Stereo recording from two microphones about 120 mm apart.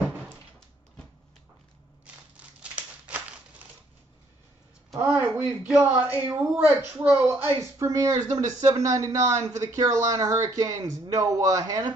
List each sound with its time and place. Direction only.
2.3 s crumpling: 10° right (ahead or behind)
4.9 s a woman's voice: 20° right (ahead or behind)